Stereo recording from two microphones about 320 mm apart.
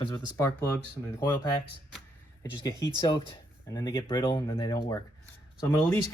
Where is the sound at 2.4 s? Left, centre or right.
Centre.